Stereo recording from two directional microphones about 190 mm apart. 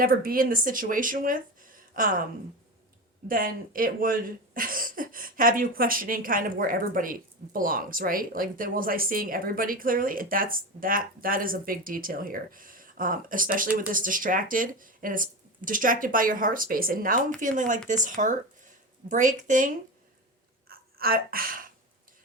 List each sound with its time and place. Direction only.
0.0 s speech: 50° right (ahead or behind)
3.2 s speech: 50° right (ahead or behind)
20.7 s a sound: 50° right (ahead or behind)